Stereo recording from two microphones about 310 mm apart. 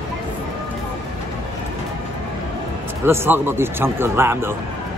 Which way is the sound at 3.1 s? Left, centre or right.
Centre.